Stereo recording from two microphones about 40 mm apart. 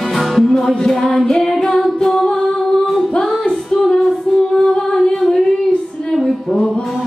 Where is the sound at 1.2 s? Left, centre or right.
Centre.